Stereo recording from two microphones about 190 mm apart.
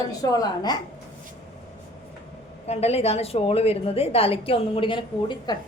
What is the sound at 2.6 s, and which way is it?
A woman's voice, 35° left (ahead or behind).